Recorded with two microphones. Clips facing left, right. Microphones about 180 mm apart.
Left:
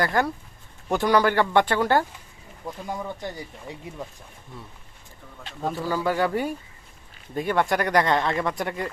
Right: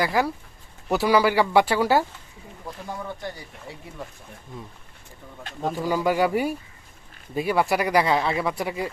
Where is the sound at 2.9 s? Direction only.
15° left (ahead or behind).